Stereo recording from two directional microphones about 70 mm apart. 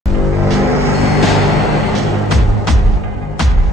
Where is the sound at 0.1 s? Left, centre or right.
Centre.